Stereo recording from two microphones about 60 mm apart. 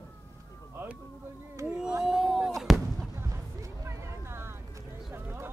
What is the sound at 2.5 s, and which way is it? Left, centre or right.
Fireworks, centre.